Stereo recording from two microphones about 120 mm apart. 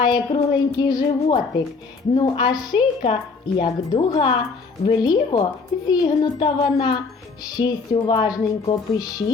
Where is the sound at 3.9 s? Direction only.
35° left (ahead or behind).